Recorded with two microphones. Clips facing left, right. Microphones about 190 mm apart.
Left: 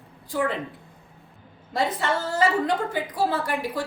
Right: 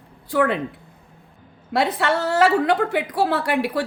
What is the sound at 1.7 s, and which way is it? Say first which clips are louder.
A woman's voice: right 4 dB; 75° right (ahead or behind).